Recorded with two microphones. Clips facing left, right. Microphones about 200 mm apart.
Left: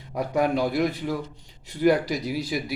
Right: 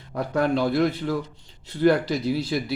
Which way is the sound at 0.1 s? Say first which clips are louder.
Even; 10° left (ahead or behind).